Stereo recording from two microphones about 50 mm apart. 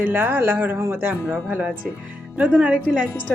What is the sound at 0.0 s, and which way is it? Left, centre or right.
A woman's voice, right.